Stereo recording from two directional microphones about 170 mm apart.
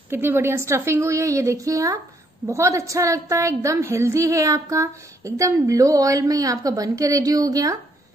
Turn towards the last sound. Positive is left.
turn(degrees=-20)  # may be behind; listen again after turning